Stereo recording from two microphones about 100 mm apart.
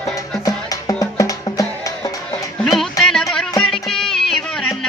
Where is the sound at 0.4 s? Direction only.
35° left (ahead or behind).